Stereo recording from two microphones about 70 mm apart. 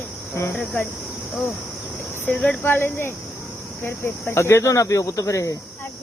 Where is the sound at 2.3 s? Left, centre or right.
Centre.